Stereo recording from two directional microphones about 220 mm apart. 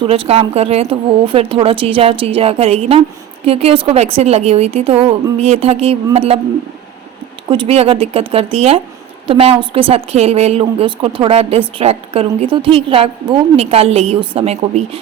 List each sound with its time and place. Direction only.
0.0 s a woman's voice: 25° right (ahead or behind)
7.5 s a woman's voice: 25° right (ahead or behind)